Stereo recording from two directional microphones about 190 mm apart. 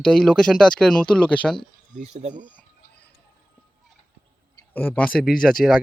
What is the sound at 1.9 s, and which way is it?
Speech, 35° right (ahead or behind).